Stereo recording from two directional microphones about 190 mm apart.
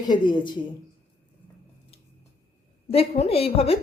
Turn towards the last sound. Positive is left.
turn(degrees=30)  # may be behind; listen again after turning